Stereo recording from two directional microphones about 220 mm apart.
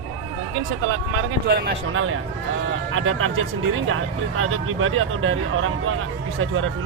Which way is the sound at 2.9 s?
65° right (ahead or behind).